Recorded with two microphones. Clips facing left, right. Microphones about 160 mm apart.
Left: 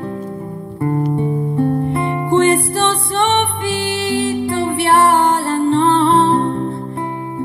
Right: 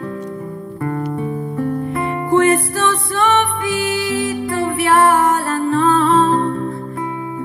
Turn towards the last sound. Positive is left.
turn(degrees=25)  # may be behind; listen again after turning